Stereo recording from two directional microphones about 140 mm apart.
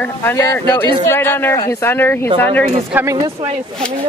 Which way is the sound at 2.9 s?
20° right (ahead or behind).